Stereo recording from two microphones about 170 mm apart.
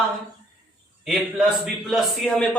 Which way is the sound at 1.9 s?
5° left (ahead or behind).